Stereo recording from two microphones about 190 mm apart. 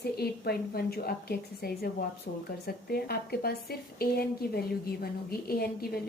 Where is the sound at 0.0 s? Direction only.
55° left (ahead or behind).